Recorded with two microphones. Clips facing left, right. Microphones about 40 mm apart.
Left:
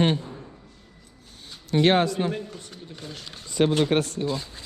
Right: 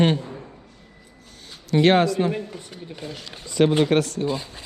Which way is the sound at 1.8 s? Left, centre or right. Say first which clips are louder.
Right 3 dB; right.